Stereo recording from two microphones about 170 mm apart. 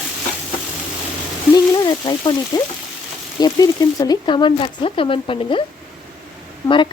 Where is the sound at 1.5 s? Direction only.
25° left (ahead or behind).